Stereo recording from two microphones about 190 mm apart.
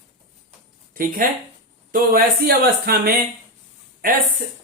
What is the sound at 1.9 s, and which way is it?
Speech, 50° right (ahead or behind).